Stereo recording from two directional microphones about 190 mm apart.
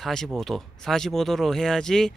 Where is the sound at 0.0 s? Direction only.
Centre (ahead or behind).